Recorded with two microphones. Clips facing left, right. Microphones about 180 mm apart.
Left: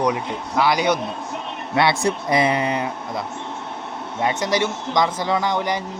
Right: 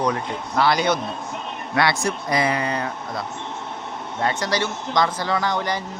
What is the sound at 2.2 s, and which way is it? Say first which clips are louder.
Speech: left 2 dB; 25° left (ahead or behind).